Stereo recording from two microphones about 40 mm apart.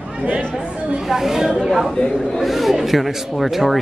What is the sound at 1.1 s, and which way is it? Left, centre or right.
Speech, centre.